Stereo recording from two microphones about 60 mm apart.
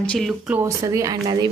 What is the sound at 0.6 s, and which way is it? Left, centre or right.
Speech, right.